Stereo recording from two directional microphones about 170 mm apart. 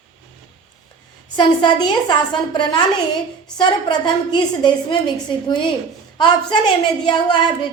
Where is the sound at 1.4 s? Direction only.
25° left (ahead or behind).